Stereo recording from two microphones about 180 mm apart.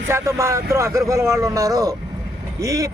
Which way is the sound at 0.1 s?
15° right (ahead or behind).